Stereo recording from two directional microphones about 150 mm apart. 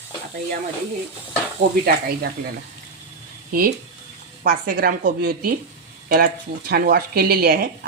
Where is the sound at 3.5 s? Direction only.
75° right (ahead or behind).